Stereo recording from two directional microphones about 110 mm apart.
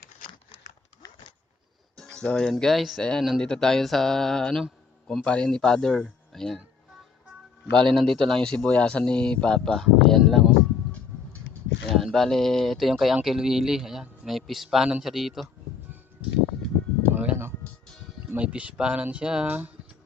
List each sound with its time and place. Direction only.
2.0 s speech: 5° left (ahead or behind)
7.9 s speech: 5° left (ahead or behind)
11.9 s speech: centre (ahead or behind)
16.2 s music: 10° right (ahead or behind)
18.3 s speech: 10° right (ahead or behind)